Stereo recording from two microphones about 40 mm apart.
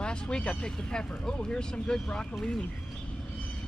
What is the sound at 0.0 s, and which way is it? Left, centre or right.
Speech, left.